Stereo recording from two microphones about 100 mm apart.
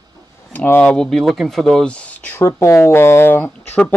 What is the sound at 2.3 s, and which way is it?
A man's voice, 30° left (ahead or behind).